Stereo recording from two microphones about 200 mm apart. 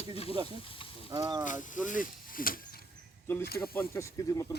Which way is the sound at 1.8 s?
40° left (ahead or behind).